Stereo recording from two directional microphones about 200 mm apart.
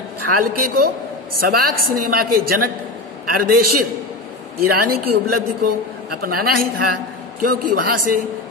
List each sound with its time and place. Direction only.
0.4 s a woman's voice: 45° right (ahead or behind)